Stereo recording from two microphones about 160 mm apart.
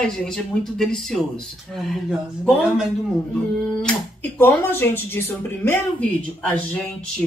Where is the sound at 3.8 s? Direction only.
5° left (ahead or behind).